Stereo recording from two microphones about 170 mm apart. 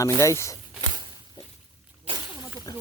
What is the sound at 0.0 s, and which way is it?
Speech, 20° left (ahead or behind).